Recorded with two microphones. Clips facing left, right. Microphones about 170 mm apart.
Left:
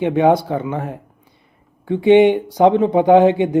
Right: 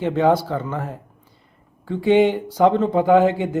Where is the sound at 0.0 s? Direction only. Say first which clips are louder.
Left 3 dB; 20° left (ahead or behind).